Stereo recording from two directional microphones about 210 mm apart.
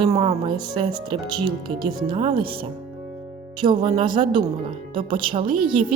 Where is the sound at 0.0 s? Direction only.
15° right (ahead or behind).